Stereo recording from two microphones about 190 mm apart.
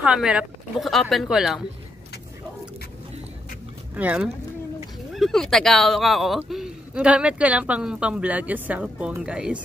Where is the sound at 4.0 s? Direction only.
10° right (ahead or behind).